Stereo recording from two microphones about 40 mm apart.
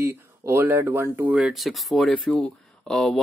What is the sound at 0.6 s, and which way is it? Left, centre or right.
Speech, right.